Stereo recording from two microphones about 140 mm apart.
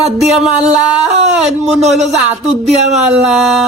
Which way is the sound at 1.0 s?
50° right (ahead or behind).